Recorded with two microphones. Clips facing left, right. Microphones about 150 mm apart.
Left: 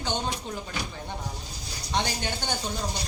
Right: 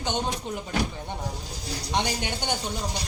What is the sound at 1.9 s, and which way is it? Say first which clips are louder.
Speech: right 1 dB; 15° right (ahead or behind).